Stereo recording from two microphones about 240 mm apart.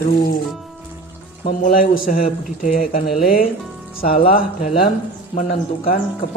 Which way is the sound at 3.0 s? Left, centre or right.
Centre.